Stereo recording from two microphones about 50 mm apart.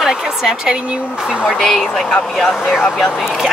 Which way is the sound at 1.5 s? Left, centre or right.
Centre.